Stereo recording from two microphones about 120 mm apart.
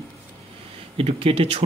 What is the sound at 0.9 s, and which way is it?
Speech, 55° right (ahead or behind).